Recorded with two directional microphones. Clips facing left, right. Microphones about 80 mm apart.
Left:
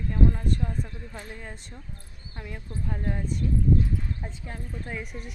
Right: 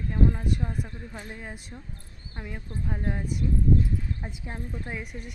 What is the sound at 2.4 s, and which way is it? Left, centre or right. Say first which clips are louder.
Speech: right 1 dB; right.